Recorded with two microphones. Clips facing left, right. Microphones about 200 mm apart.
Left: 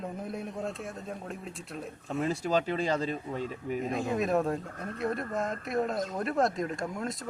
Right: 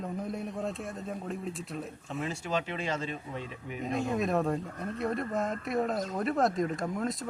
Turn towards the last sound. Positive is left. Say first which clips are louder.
# right 2 dB
turn(degrees=0)  # may be behind; listen again after turning